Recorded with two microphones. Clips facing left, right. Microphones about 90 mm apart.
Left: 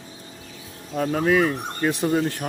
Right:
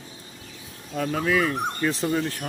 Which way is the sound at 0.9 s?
35° left (ahead or behind).